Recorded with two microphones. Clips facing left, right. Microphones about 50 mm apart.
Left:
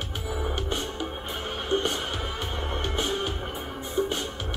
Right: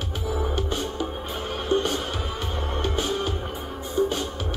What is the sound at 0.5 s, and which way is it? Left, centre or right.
Music, left.